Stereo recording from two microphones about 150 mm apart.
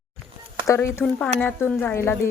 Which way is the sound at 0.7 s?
20° left (ahead or behind).